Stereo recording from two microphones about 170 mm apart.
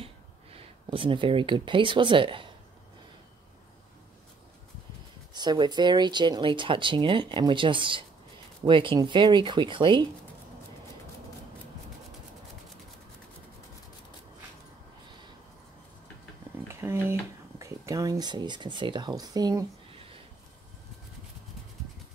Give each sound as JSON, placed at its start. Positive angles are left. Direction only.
{"t": 0.0, "sound": "speech", "side_deg": -35}
{"t": 5.3, "sound": "speech", "side_deg": -25}
{"t": 16.6, "sound": "a sound", "side_deg": -15}